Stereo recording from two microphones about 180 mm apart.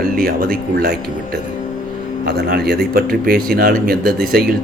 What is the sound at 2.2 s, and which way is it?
Speech, 65° right (ahead or behind).